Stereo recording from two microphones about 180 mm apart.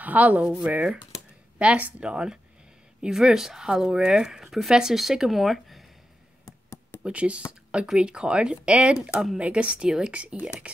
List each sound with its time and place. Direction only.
0.0 s speech: 10° right (ahead or behind)
6.4 s a sound: 20° left (ahead or behind)
7.0 s speech: 5° right (ahead or behind)